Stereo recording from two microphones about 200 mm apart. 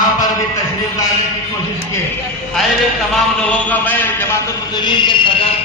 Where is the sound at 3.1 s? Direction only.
5° left (ahead or behind).